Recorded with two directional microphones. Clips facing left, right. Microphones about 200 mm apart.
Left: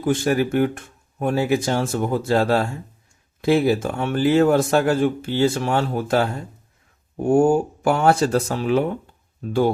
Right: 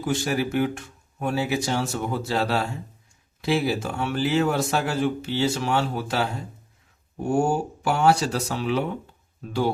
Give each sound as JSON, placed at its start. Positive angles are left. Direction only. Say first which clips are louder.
{"t": 0.0, "sound": "a man's voice", "louder": "left 5 dB", "side_deg": 50}
{"t": 7.3, "sound": "a man's voice", "louder": "left 6 dB", "side_deg": 50}